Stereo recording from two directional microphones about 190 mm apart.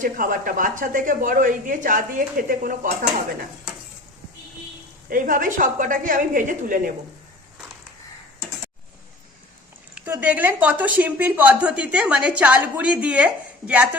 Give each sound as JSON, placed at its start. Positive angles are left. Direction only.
{"t": 0.0, "sound": "speech", "side_deg": -45}
{"t": 5.0, "sound": "speech", "side_deg": -45}
{"t": 9.9, "sound": "a woman's voice", "side_deg": -10}